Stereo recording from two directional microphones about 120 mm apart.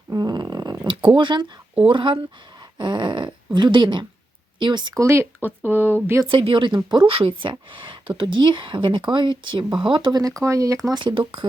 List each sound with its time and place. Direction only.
0.1 s purr: 35° right (ahead or behind)
1.9 s speech: 45° right (ahead or behind)
4.9 s speech: 20° right (ahead or behind)
6.3 s speech: 45° right (ahead or behind); by 11.0 s 25° right (ahead or behind)